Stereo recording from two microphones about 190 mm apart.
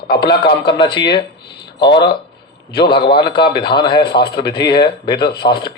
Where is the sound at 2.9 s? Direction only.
25° left (ahead or behind).